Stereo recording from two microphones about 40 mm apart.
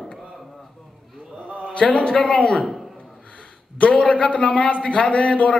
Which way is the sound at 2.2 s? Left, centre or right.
Left.